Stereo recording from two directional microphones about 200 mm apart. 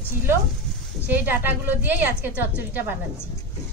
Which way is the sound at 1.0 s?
10° right (ahead or behind).